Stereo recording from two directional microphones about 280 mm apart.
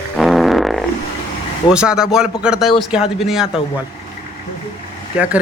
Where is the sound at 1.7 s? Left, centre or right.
Centre.